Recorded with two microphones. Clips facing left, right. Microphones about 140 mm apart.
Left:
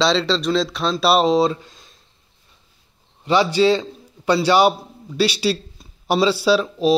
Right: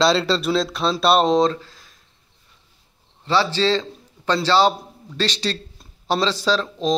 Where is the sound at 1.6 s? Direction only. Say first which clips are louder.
Right 3 dB; 20° left (ahead or behind).